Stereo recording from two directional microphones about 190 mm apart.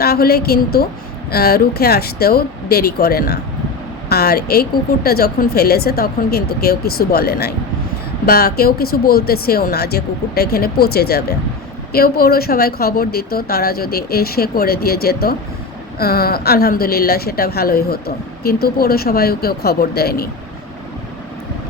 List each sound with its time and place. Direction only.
0.0 s a woman's voice: 55° left (ahead or behind)